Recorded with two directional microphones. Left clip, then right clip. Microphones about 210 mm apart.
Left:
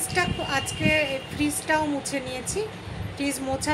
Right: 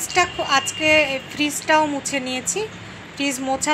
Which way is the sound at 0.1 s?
10° right (ahead or behind).